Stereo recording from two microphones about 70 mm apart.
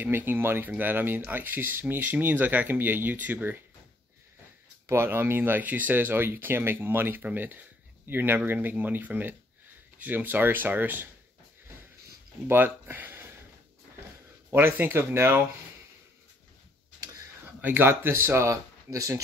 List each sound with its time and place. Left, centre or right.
0.0 s speech: right
4.8 s speech: right
12.4 s speech: right
14.5 s speech: right
17.6 s speech: right